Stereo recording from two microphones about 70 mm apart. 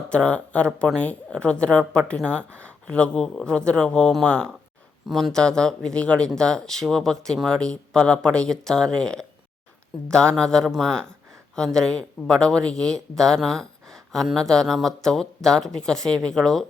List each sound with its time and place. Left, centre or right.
0.1 s speech: centre